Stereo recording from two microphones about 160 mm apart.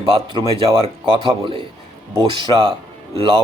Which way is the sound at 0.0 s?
30° right (ahead or behind).